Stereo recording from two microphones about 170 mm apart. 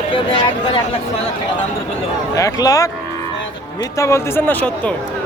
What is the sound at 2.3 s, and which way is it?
Speech, 20° left (ahead or behind).